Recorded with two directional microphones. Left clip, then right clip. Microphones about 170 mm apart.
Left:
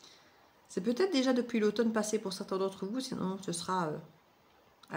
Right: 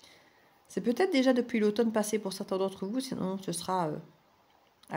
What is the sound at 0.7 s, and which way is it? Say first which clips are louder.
Speech: right 3 dB; 60° right (ahead or behind).